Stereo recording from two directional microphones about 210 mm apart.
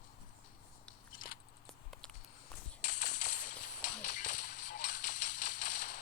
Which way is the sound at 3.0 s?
40° left (ahead or behind).